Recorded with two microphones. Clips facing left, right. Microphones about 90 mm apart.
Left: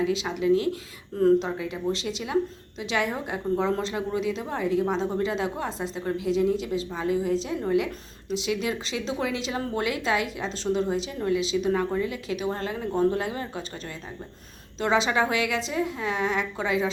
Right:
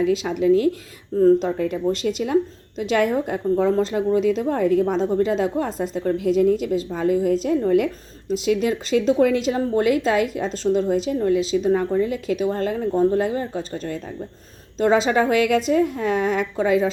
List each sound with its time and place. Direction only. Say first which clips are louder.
0.0 s speech: right 6 dB; 50° right (ahead or behind)